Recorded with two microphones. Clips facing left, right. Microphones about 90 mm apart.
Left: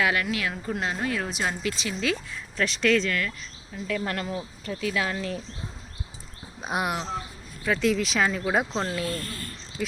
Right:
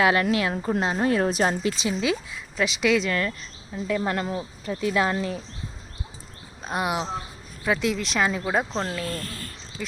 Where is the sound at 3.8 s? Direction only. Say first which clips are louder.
Right 4 dB; 20° right (ahead or behind).